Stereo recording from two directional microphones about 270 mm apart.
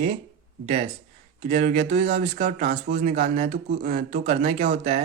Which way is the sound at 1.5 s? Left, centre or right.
Right.